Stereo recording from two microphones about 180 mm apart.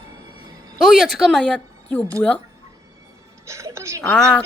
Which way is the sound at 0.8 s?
Centre (ahead or behind).